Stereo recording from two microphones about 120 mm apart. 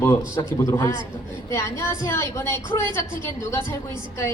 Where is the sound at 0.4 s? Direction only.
30° left (ahead or behind).